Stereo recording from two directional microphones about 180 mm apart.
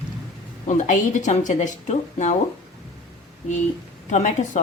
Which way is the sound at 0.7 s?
45° left (ahead or behind).